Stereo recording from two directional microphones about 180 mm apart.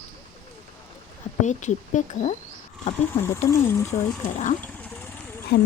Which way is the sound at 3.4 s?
15° left (ahead or behind).